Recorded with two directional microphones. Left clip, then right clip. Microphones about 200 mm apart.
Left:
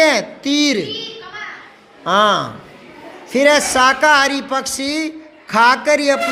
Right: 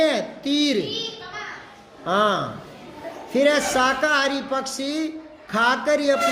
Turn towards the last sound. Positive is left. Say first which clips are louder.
# left 5 dB
turn(degrees=30)  # may be behind; listen again after turning